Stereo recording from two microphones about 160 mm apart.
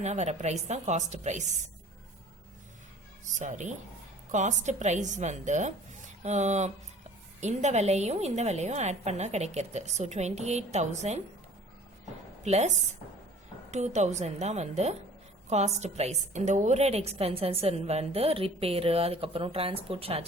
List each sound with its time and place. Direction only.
0.0 s a woman's voice: 45° right (ahead or behind)
3.3 s a woman's voice: 50° right (ahead or behind)
12.5 s a woman's voice: 40° right (ahead or behind)